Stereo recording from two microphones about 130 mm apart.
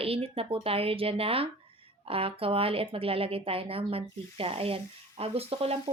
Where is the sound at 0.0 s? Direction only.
45° right (ahead or behind).